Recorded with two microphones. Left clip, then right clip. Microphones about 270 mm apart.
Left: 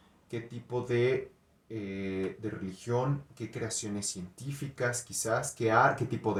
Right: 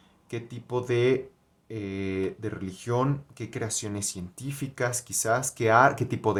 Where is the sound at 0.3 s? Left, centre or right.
Right.